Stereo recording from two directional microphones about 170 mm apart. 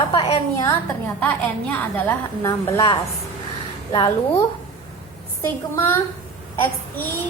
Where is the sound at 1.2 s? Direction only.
10° left (ahead or behind).